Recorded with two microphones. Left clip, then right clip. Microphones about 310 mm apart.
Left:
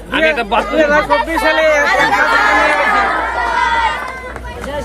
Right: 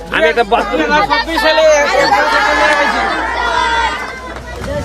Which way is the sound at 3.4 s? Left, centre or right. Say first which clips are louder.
Right 1 dB; left.